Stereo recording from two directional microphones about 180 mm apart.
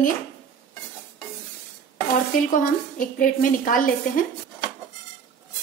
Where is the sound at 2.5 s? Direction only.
50° left (ahead or behind).